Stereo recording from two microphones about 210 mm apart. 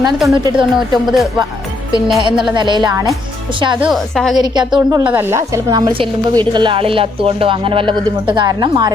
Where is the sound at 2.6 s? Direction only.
20° right (ahead or behind).